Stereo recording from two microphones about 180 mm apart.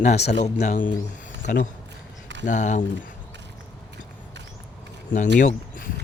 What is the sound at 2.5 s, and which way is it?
Speech, 40° left (ahead or behind).